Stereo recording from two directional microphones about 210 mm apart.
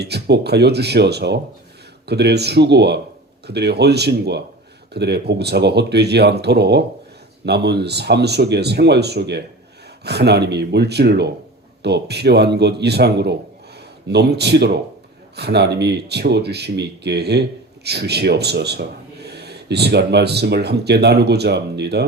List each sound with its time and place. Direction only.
0.0 s speech: 50° right (ahead or behind)